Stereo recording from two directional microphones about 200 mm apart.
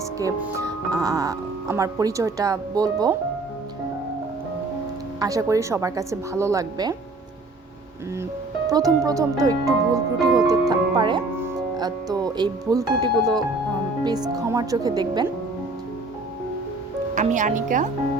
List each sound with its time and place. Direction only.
0.2 s speech: 15° right (ahead or behind)
5.2 s speech: 15° right (ahead or behind)
8.2 s speech: 15° right (ahead or behind)
17.2 s speech: 40° right (ahead or behind)